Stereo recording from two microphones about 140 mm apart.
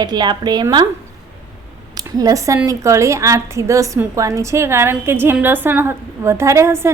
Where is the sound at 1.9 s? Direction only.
25° right (ahead or behind).